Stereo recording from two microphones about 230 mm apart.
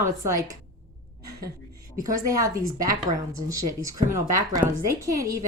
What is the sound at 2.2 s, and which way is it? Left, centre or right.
Speech, centre.